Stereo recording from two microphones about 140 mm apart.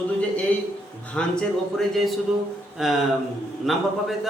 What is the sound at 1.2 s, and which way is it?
Speech, 5° left (ahead or behind).